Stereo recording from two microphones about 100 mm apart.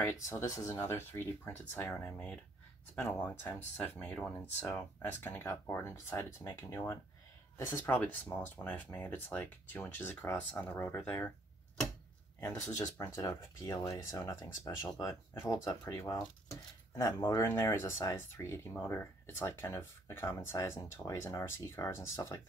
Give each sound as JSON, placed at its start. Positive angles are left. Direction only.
{"t": 0.2, "sound": "speech", "side_deg": 30}
{"t": 4.4, "sound": "speech", "side_deg": 20}
{"t": 12.8, "sound": "speech", "side_deg": 25}
{"t": 15.9, "sound": "speech", "side_deg": 20}